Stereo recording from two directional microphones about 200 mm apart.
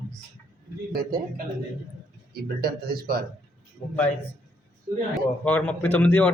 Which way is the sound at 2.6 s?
50° right (ahead or behind).